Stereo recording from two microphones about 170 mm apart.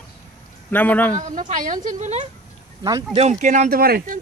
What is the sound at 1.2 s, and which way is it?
Speech, 45° right (ahead or behind).